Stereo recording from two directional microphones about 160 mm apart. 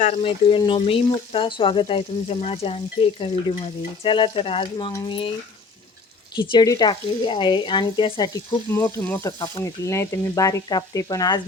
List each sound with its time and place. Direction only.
0.2 s speech: 35° left (ahead or behind)
6.3 s speech: 30° left (ahead or behind)
8.7 s speech: 10° left (ahead or behind)